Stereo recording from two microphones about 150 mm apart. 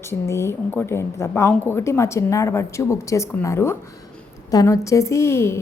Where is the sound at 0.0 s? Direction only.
20° left (ahead or behind).